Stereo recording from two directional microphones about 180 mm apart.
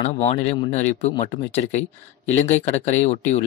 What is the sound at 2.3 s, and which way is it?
Speech, 40° left (ahead or behind).